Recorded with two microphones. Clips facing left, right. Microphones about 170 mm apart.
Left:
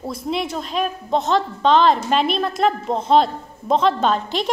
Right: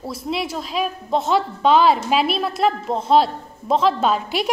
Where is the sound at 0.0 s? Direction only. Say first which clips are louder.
Left 1 dB; 5° right (ahead or behind).